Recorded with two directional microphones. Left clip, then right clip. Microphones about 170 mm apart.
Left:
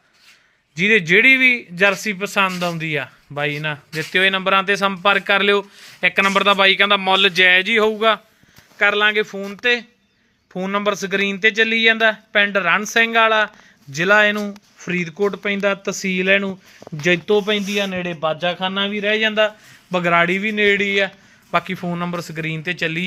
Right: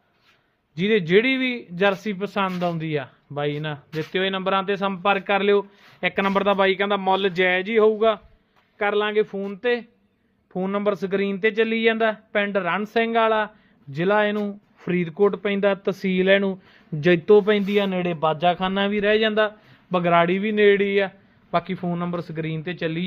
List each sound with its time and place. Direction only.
0.8 s speech: centre (ahead or behind); by 16.6 s 15° right (ahead or behind)
17.0 s speech: 30° right (ahead or behind)
19.9 s speech: 10° right (ahead or behind)
21.5 s speech: 5° left (ahead or behind)